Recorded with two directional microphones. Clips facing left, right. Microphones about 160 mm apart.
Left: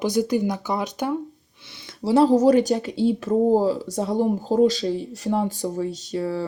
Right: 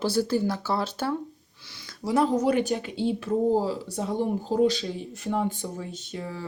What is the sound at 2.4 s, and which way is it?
Speech, 40° left (ahead or behind).